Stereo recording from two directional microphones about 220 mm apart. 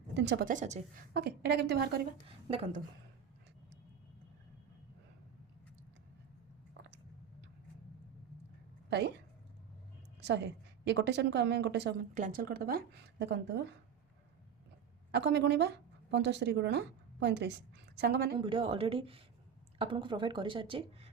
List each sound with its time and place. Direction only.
0.1 s a woman's voice: 50° right (ahead or behind)
8.9 s speech: 50° right (ahead or behind)
10.2 s a woman's voice: 50° right (ahead or behind)
12.1 s a woman's voice: 40° right (ahead or behind)
15.1 s a woman's voice: 50° right (ahead or behind)
18.3 s speech: 20° right (ahead or behind)